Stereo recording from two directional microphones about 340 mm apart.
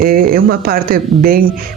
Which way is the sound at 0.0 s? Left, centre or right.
Right.